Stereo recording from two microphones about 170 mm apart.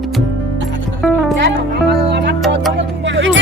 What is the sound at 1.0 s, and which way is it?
Music, centre (ahead or behind).